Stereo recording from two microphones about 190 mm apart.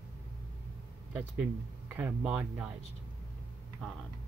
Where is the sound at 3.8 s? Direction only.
5° left (ahead or behind).